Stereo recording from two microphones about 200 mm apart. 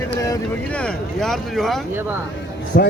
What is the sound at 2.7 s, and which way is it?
Speech, 50° left (ahead or behind).